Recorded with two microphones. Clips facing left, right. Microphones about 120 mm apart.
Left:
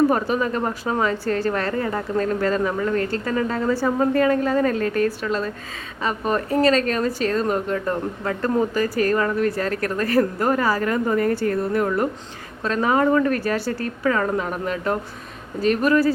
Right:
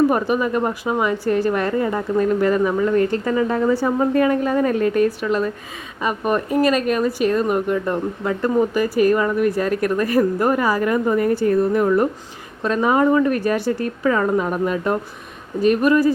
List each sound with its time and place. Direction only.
0.1 s a woman's voice: 15° right (ahead or behind)